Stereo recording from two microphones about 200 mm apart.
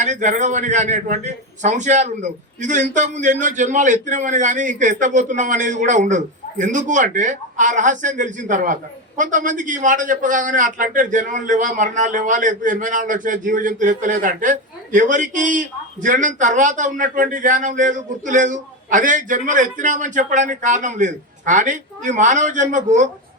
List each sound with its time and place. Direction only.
0.0 s a man's voice: 40° right (ahead or behind)